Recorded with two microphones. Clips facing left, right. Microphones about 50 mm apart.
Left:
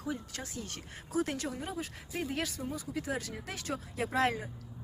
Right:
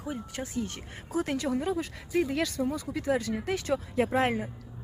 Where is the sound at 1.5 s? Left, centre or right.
Right.